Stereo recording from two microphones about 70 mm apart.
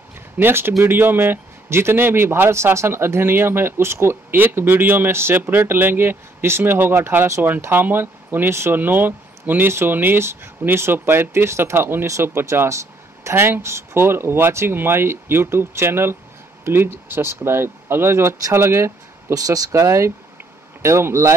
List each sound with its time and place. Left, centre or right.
0.4 s a man's voice: right
19.3 s a man's voice: right